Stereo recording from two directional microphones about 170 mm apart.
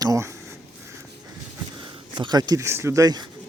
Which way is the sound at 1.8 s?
25° right (ahead or behind).